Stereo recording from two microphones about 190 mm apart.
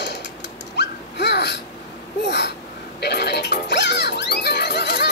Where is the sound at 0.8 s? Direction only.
60° left (ahead or behind).